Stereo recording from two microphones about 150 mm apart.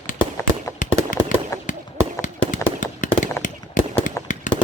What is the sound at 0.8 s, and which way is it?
Fireworks, 60° left (ahead or behind).